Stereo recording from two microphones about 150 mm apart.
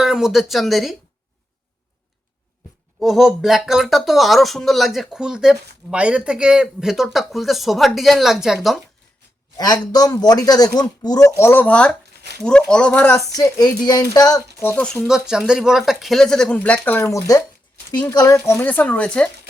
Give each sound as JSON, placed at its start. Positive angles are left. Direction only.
{"t": 0.0, "sound": "speech", "side_deg": -5}
{"t": 3.0, "sound": "speech", "side_deg": 0}
{"t": 9.6, "sound": "speech", "side_deg": 25}
{"t": 13.3, "sound": "speech", "side_deg": 25}
{"t": 15.0, "sound": "speech", "side_deg": -5}